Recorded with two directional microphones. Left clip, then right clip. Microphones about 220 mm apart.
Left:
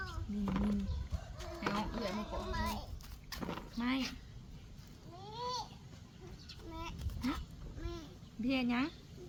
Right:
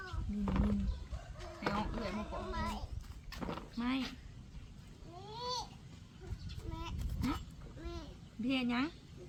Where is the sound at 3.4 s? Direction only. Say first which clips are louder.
Even; 5° left (ahead or behind).